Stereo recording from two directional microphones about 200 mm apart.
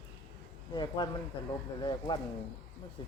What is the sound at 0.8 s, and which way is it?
A man's voice, 20° left (ahead or behind).